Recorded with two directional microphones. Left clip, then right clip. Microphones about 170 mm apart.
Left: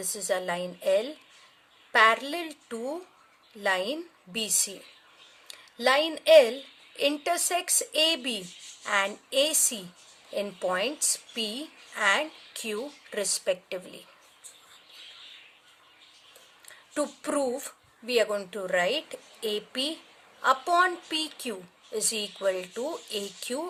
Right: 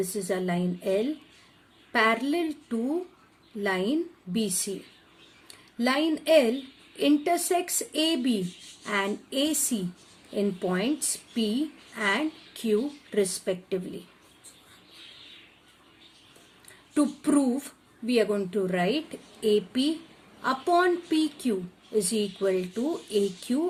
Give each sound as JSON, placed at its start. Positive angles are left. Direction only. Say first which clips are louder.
{"t": 0.1, "sound": "speech", "louder": "even", "side_deg": 25}
{"t": 5.7, "sound": "speech", "louder": "left 2 dB", "side_deg": 30}
{"t": 16.9, "sound": "speech", "louder": "right 4 dB", "side_deg": 20}